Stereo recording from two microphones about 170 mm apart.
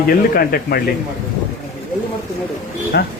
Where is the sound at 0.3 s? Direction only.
60° left (ahead or behind).